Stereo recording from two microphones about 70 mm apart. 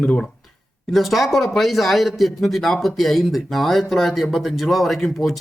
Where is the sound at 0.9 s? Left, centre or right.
Centre.